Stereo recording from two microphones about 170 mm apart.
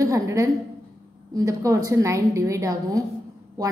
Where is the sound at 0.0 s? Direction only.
20° right (ahead or behind).